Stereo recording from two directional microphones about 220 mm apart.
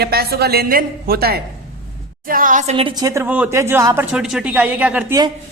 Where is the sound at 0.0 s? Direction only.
45° right (ahead or behind); by 5.2 s 10° right (ahead or behind).